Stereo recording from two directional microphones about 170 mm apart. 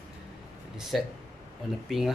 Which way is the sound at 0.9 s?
Centre (ahead or behind).